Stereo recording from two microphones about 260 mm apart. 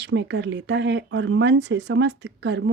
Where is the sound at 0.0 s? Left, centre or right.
Right.